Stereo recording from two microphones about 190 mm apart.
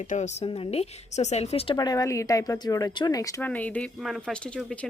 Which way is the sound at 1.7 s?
20° left (ahead or behind).